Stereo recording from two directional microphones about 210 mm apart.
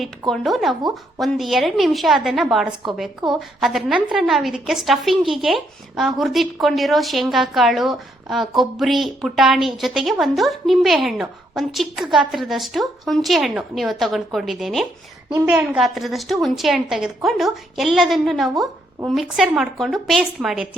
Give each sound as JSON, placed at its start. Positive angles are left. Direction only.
{"t": 0.0, "sound": "a woman's voice", "side_deg": 0}